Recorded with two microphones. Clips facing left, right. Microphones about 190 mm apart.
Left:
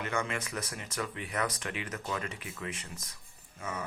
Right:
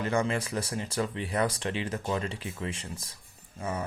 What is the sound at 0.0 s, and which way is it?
Speech, 35° right (ahead or behind).